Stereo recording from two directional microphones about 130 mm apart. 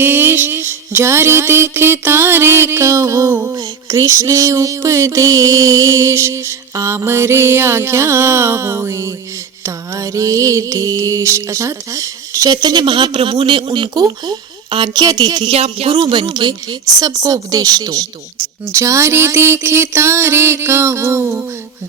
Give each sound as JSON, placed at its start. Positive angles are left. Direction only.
{"t": 0.0, "sound": "music", "side_deg": -15}
{"t": 15.4, "sound": "speech", "side_deg": -50}
{"t": 17.0, "sound": "music", "side_deg": -30}